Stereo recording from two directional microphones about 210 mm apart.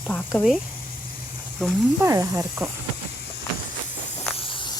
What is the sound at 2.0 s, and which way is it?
Speech, 15° right (ahead or behind).